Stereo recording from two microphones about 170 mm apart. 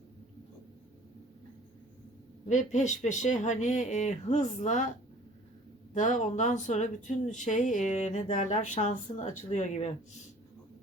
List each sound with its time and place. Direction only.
2.5 s speech: 45° left (ahead or behind)